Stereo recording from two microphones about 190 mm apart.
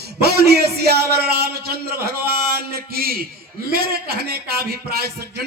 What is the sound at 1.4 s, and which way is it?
A man's voice, 55° right (ahead or behind).